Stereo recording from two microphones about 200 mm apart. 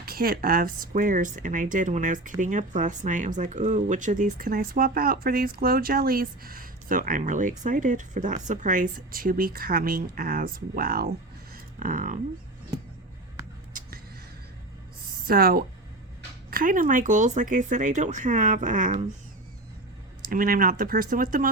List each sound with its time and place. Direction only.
0.0 s speech: 50° right (ahead or behind)
11.5 s a sound: 40° right (ahead or behind)
15.3 s speech: 45° right (ahead or behind)
20.3 s speech: 45° right (ahead or behind)